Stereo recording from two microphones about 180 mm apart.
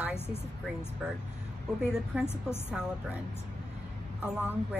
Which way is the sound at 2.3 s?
15° left (ahead or behind).